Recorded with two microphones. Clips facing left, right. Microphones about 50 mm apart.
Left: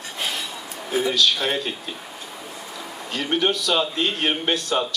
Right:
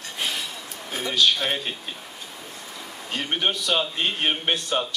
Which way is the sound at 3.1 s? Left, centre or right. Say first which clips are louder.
Left 3 dB; centre.